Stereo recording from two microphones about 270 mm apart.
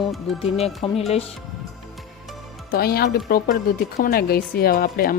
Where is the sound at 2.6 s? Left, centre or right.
Left.